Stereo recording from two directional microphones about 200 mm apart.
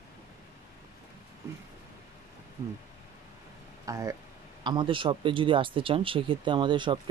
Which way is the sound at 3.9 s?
15° right (ahead or behind).